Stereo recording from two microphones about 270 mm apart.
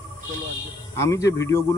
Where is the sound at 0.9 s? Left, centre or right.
Centre.